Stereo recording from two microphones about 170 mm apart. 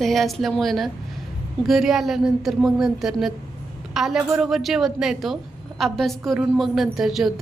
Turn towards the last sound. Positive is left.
turn(degrees=0)  # may be behind; listen again after turning